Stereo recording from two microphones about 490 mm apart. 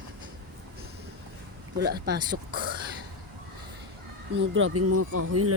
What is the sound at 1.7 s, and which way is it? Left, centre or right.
Speech, centre.